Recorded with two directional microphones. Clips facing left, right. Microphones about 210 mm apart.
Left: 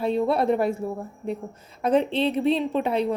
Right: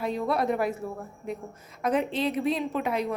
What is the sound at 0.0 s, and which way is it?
A woman's voice, 30° left (ahead or behind).